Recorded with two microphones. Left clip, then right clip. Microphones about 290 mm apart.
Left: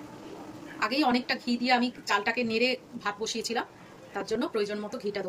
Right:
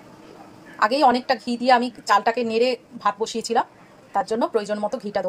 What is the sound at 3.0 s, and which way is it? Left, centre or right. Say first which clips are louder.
A woman's voice: right 9 dB; right.